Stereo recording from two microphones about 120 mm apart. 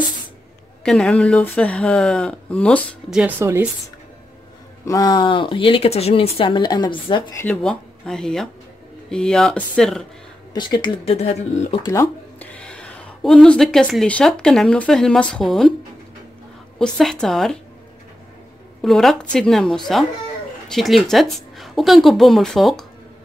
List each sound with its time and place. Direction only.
0.8 s speech: 5° left (ahead or behind)
3.1 s speech: 10° right (ahead or behind)
3.3 s speech: 20° right (ahead or behind)
4.8 s speech: 30° left (ahead or behind)
7.4 s speech: 5° left (ahead or behind)
10.5 s speech: 35° left (ahead or behind)
11.1 s speech: 60° left (ahead or behind)
11.8 s speech: 25° left (ahead or behind)
12.4 s a sound: 10° left (ahead or behind)
14.0 s speech: 10° left (ahead or behind)
16.7 s speech: 5° left (ahead or behind)
18.8 s speech: centre (ahead or behind)